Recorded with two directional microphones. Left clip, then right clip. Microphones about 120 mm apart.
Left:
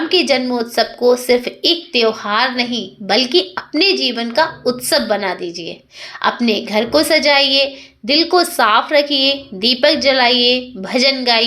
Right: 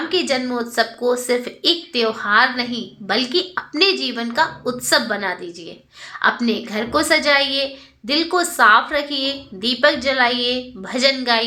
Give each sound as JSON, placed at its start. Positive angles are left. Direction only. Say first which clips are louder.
{"t": 0.1, "sound": "speech", "louder": "left 6 dB", "side_deg": 25}